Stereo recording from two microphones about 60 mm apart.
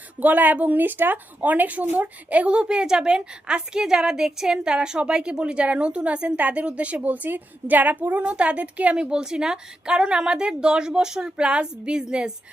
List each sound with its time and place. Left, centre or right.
0.2 s speech: right; by 12.3 s centre